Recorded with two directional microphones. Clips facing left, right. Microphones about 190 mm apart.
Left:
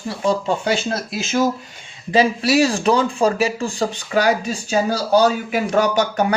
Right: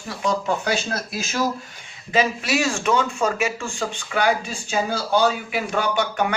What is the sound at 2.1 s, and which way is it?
Speech, 35° left (ahead or behind).